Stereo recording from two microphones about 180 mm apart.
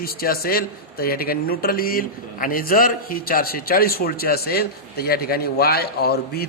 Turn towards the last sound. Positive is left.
turn(degrees=60)  # may be behind; listen again after turning